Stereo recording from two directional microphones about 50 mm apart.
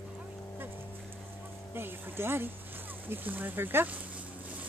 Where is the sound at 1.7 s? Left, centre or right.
Right.